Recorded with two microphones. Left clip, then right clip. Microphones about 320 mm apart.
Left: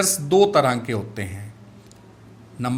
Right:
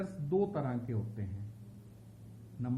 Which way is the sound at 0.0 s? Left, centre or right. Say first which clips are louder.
Left 17 dB; left.